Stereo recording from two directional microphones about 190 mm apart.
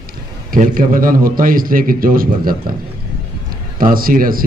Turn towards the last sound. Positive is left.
turn(degrees=-50)  # may be behind; listen again after turning